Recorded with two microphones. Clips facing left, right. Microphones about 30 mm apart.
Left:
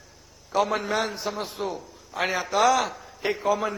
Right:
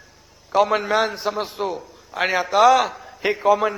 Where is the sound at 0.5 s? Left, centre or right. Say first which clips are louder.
Right 6 dB; right.